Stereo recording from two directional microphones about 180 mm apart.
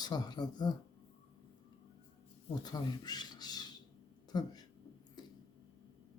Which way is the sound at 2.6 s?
20° left (ahead or behind).